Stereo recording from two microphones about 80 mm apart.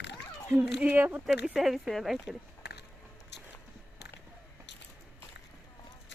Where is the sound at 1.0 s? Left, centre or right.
Right.